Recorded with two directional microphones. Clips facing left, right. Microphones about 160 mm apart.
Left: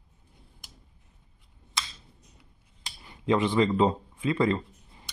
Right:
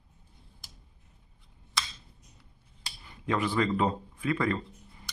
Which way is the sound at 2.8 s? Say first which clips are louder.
Left 3 dB; 20° left (ahead or behind).